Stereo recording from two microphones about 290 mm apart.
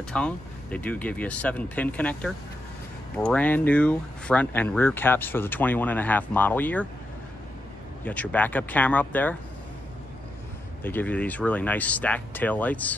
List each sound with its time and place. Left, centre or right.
0.1 s speech: centre
8.0 s speech: centre
10.8 s speech: centre